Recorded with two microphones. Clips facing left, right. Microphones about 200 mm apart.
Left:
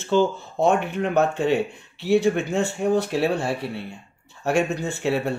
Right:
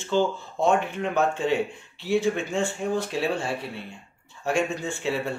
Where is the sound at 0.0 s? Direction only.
55° left (ahead or behind).